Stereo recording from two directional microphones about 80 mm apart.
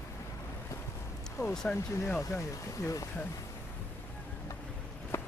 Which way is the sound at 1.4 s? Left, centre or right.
Left.